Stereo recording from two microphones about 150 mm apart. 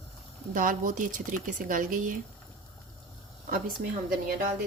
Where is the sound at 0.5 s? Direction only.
60° right (ahead or behind).